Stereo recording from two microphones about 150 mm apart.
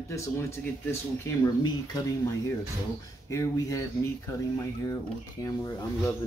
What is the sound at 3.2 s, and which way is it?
Speech, 20° left (ahead or behind).